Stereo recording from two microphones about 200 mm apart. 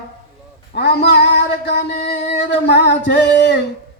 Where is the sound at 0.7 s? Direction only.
55° left (ahead or behind).